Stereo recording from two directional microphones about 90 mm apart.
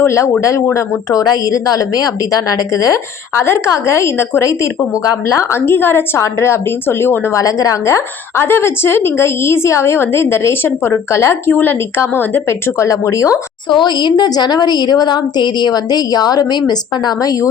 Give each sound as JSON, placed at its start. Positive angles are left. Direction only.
{"t": 0.0, "sound": "a woman's voice", "side_deg": 30}
{"t": 1.2, "sound": "a woman's voice", "side_deg": 45}
{"t": 7.3, "sound": "a woman's voice", "side_deg": 40}
{"t": 12.8, "sound": "a woman's voice", "side_deg": 35}
{"t": 13.7, "sound": "a woman's voice", "side_deg": 55}